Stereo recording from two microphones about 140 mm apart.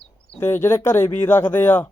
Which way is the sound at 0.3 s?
20° left (ahead or behind).